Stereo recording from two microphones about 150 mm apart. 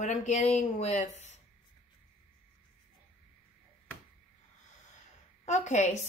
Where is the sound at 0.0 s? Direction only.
50° left (ahead or behind).